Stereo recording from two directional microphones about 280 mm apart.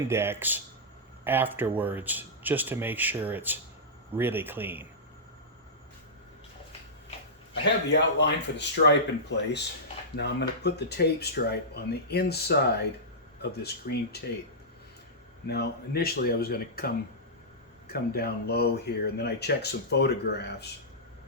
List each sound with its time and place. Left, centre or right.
0.1 s speech: centre
7.6 s speech: left
15.4 s speech: left